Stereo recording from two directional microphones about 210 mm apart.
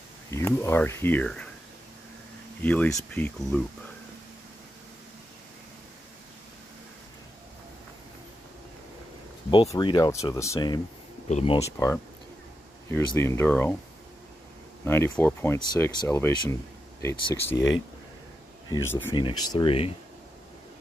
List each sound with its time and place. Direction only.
0.3 s speech: 10° left (ahead or behind)
2.6 s speech: 10° left (ahead or behind)
9.5 s speech: 20° left (ahead or behind)
11.2 s speech: 30° left (ahead or behind)
12.9 s speech: 10° left (ahead or behind)
14.9 s speech: 10° left (ahead or behind)
17.6 s speech: 65° left (ahead or behind)
18.7 s speech: 10° left (ahead or behind); by 20.0 s 25° left (ahead or behind)